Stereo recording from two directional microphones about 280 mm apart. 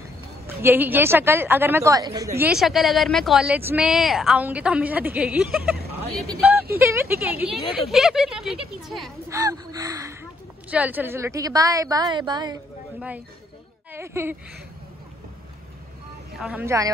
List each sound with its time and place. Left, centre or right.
0.6 s a woman's voice: centre
6.8 s a woman's voice: centre
9.3 s a woman's voice: centre
16.3 s a woman's voice: centre